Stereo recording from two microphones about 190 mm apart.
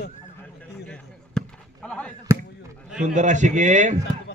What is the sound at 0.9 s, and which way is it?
Basketball bounce, 5° left (ahead or behind).